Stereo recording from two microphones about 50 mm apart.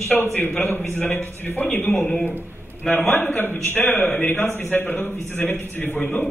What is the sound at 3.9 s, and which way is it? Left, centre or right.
Speech, centre.